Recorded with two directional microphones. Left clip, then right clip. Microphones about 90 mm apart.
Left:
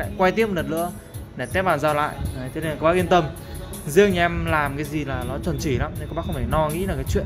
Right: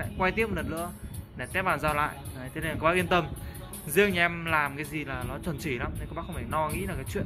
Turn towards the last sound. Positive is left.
turn(degrees=25)  # may be behind; listen again after turning